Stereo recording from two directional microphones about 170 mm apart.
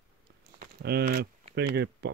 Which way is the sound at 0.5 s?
65° right (ahead or behind).